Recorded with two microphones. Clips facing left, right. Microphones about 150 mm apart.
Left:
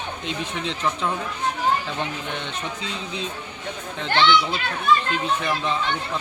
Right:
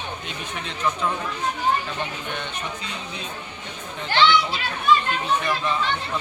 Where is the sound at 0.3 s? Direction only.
90° left.